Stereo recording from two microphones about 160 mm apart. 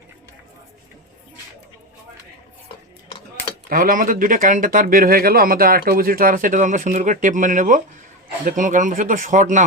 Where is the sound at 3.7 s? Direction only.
60° right (ahead or behind).